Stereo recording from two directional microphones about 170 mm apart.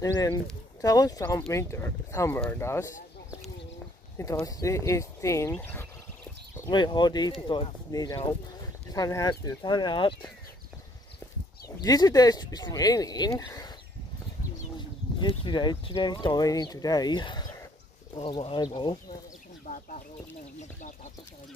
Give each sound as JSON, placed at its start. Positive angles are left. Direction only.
{"t": 0.7, "sound": "speech", "side_deg": 20}
{"t": 4.2, "sound": "speech", "side_deg": 20}
{"t": 6.6, "sound": "speech", "side_deg": 25}
{"t": 11.8, "sound": "speech", "side_deg": 20}
{"t": 14.8, "sound": "speech", "side_deg": 30}